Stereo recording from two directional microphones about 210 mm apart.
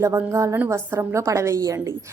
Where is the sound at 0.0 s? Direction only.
15° right (ahead or behind).